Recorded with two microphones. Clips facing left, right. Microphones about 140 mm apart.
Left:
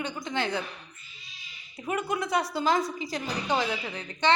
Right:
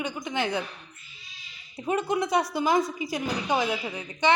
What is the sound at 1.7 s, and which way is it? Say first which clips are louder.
A woman's voice: right 4 dB; 25° right (ahead or behind).